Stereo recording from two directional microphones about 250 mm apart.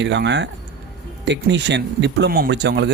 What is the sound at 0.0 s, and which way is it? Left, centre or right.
Speech, right.